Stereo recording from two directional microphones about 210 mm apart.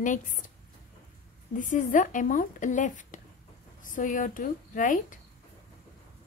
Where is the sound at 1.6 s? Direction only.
35° left (ahead or behind).